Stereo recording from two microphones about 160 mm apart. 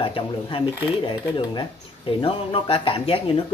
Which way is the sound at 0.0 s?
35° left (ahead or behind).